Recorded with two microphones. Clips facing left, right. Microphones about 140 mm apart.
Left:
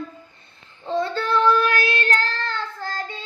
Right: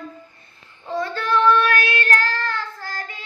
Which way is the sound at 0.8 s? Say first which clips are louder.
Left 1 dB; 25° left (ahead or behind).